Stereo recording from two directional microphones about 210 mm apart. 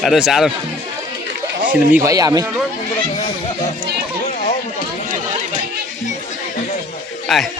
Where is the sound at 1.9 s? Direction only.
15° right (ahead or behind).